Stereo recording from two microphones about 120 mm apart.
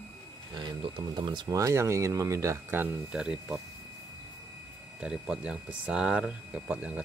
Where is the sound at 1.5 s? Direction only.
25° right (ahead or behind); by 3.6 s 5° right (ahead or behind).